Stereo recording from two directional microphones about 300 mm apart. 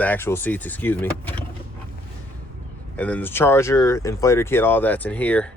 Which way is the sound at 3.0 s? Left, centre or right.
Centre.